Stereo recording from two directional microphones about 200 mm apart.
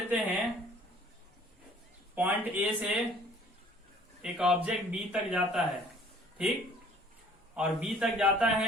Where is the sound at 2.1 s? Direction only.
10° right (ahead or behind).